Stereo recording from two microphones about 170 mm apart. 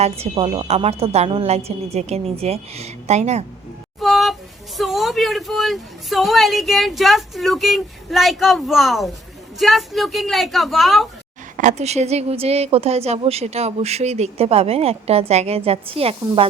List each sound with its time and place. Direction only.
0.0 s a woman's voice: 35° right (ahead or behind)
4.0 s a sound: centre (ahead or behind)
4.8 s speech: centre (ahead or behind)
11.5 s a woman's voice: 45° right (ahead or behind)